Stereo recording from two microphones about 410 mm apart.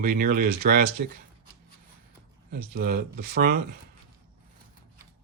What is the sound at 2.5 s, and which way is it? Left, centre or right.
Speech, right.